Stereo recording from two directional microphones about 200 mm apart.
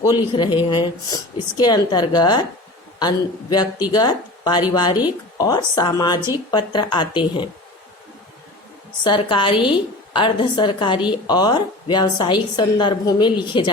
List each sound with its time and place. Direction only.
0.0 s a woman's voice: 20° left (ahead or behind)
9.0 s a woman's voice: 25° left (ahead or behind)